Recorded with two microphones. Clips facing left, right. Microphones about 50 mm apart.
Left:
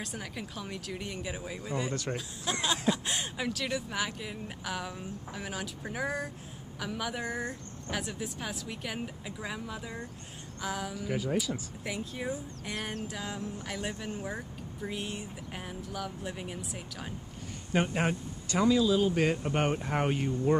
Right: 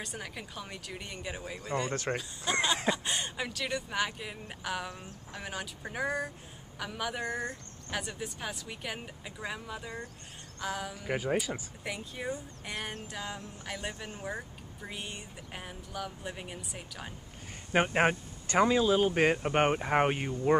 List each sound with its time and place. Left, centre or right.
0.0 s speech: centre
11.1 s speech: right
11.8 s speech: centre
17.7 s speech: right